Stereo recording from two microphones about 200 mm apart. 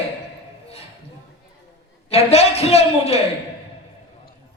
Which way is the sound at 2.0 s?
30° left (ahead or behind).